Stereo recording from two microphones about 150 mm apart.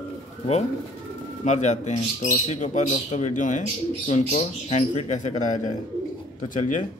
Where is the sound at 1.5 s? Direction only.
50° left (ahead or behind).